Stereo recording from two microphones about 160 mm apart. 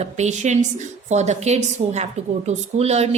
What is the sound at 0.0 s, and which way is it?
A woman's voice, 45° right (ahead or behind).